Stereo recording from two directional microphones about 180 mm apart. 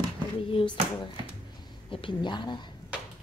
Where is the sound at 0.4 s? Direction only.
30° left (ahead or behind).